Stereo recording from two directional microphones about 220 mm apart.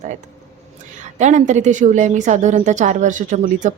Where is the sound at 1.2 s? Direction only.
35° right (ahead or behind).